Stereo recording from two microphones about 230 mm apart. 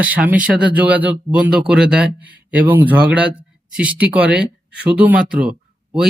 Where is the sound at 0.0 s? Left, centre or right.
Centre.